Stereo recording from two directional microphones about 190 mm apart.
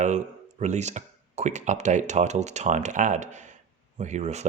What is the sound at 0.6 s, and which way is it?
Speech, 35° right (ahead or behind).